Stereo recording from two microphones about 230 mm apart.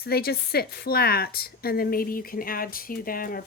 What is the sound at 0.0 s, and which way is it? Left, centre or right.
A woman's voice, left.